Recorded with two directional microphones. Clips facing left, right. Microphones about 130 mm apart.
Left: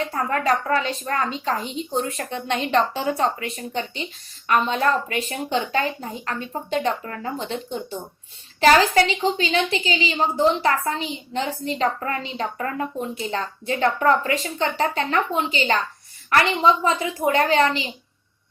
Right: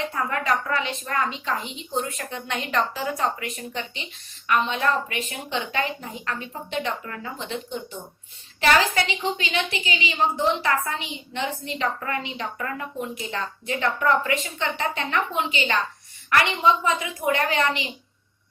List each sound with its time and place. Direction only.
0.1 s a woman's voice: 40° left (ahead or behind)